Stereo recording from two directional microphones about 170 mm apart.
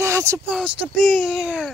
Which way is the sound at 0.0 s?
15° right (ahead or behind).